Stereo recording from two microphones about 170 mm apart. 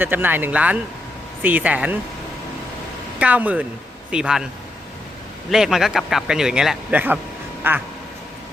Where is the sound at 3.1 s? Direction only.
10° right (ahead or behind).